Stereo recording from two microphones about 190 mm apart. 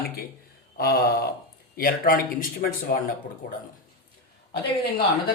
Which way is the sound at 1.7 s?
50° left (ahead or behind).